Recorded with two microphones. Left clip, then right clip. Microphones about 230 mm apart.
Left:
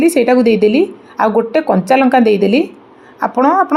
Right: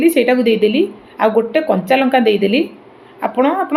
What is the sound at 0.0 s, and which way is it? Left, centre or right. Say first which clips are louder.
A woman's voice: left 2 dB; left.